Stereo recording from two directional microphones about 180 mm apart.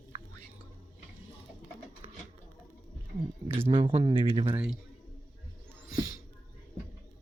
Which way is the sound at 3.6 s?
30° right (ahead or behind).